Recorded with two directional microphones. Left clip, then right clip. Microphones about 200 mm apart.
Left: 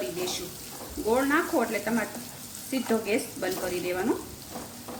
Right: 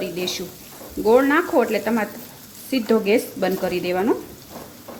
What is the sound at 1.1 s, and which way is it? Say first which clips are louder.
A woman's voice: right 8 dB; 45° right (ahead or behind).